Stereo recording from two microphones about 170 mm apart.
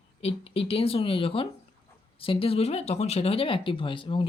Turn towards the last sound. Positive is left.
turn(degrees=30)  # may be behind; listen again after turning